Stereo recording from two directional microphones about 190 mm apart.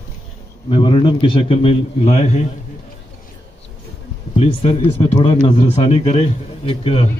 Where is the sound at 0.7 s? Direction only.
25° left (ahead or behind).